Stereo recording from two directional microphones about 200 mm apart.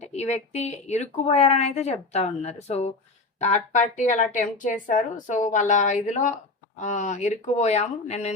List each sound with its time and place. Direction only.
0.0 s speech: 35° left (ahead or behind)